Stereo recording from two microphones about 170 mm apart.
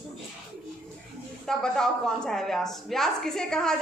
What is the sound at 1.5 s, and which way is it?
A woman's voice, 5° left (ahead or behind).